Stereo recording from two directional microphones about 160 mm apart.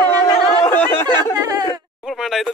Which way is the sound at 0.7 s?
15° left (ahead or behind).